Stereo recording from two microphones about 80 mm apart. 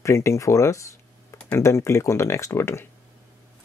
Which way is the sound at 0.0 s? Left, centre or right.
Left.